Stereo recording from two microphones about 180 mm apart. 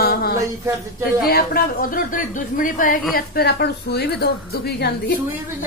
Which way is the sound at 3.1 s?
60° left (ahead or behind).